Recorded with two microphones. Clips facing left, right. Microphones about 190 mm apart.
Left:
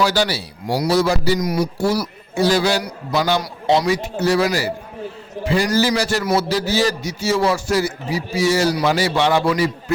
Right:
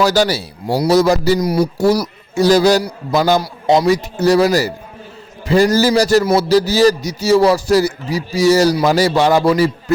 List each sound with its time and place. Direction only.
0.0 s a man's voice: 40° right (ahead or behind)